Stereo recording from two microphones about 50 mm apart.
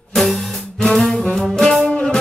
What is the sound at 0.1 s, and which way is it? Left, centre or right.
Music, centre.